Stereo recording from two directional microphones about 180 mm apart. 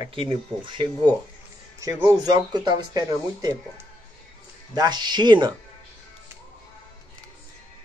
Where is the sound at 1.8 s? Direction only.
15° right (ahead or behind).